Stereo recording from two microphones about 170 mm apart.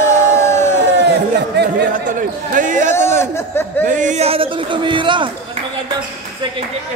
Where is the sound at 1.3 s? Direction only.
85° right.